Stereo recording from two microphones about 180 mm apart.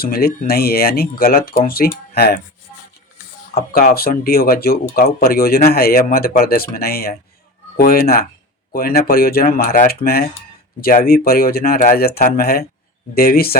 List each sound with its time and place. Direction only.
0.0 s speech: 55° left (ahead or behind)
3.5 s speech: 55° left (ahead or behind)